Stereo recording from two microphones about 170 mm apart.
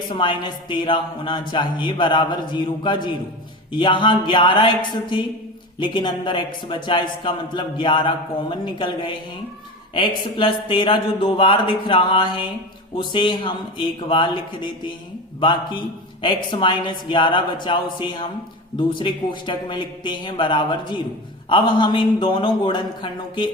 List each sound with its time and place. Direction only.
0.1 s a man's voice: 30° left (ahead or behind)
10.3 s a man's voice: 30° left (ahead or behind)